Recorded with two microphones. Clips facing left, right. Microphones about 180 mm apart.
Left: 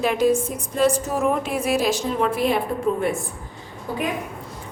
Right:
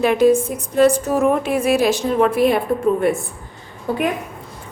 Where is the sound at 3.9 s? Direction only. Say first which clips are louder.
Right 6 dB; 65° right (ahead or behind).